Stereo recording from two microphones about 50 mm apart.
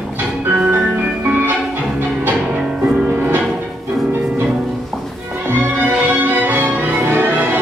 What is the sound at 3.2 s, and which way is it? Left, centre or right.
Music, right.